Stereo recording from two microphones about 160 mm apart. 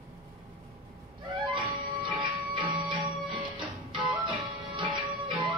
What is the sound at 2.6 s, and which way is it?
Music, 30° right (ahead or behind).